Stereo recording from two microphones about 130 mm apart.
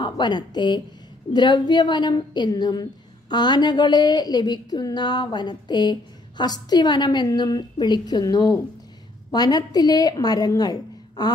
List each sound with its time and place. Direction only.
0.0 s a woman's voice: 35° left (ahead or behind)